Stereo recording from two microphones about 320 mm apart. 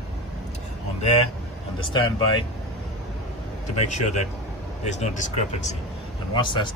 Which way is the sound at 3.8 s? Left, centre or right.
Left.